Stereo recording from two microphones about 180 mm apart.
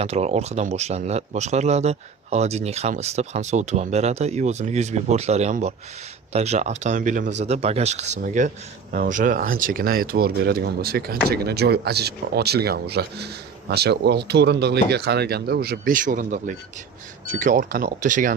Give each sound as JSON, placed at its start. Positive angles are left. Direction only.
{"t": 0.0, "sound": "speech", "side_deg": -35}